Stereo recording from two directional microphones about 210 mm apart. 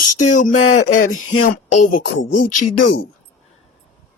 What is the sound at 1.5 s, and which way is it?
Speech, 40° left (ahead or behind).